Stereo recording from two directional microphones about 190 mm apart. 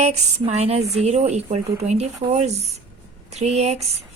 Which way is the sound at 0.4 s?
35° right (ahead or behind).